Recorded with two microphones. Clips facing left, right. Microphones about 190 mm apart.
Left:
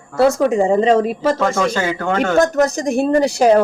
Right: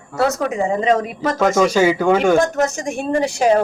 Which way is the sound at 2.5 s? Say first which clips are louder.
Left 4 dB; 35° left (ahead or behind).